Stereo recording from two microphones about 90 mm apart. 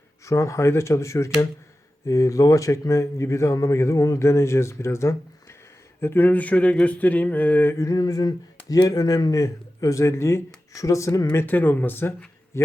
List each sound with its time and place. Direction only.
0.3 s a man's voice: 35° left (ahead or behind)
7.8 s a sound: 40° left (ahead or behind)
8.9 s a man's voice: 40° left (ahead or behind)
11.3 s a man's voice: 20° left (ahead or behind)